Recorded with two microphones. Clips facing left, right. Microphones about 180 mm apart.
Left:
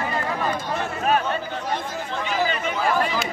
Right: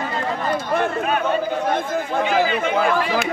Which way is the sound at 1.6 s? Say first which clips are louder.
Right 6 dB; 55° right (ahead or behind).